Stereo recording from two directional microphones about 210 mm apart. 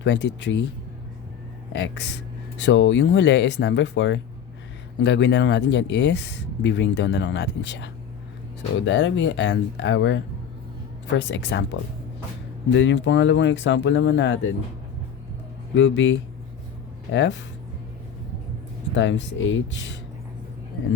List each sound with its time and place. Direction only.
0.0 s speech: 55° left (ahead or behind)
1.7 s speech: 55° left (ahead or behind)
15.7 s speech: 60° left (ahead or behind)
18.9 s speech: 60° left (ahead or behind)